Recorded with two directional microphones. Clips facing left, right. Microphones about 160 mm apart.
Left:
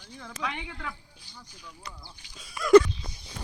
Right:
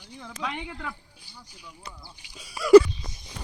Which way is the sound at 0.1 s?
15° right (ahead or behind).